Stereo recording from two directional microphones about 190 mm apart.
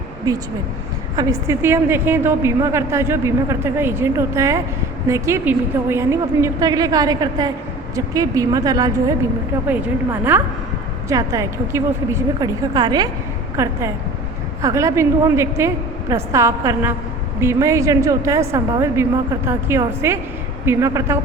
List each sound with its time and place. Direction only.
1.1 s a woman's voice: 20° right (ahead or behind)